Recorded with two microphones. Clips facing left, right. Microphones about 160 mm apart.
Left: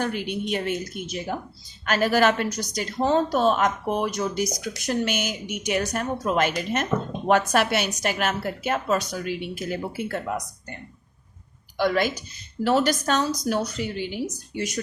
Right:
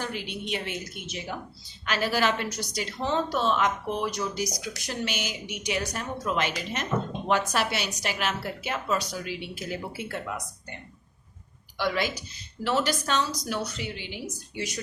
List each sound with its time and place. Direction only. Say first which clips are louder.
0.0 s a woman's voice: left 7 dB; 50° left (ahead or behind)
11.8 s a woman's voice: left 5 dB; 50° left (ahead or behind)